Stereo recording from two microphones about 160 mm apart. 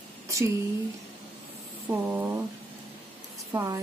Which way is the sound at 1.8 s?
10° right (ahead or behind).